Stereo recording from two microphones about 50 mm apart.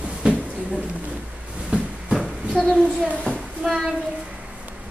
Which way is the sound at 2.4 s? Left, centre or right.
Centre.